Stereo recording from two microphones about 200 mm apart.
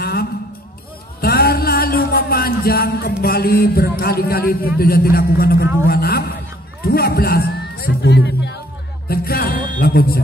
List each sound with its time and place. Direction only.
0.0 s a sound: 50° left (ahead or behind)
5.9 s music: 50° left (ahead or behind)
6.9 s a man's voice: 50° left (ahead or behind)
9.1 s music: 50° left (ahead or behind)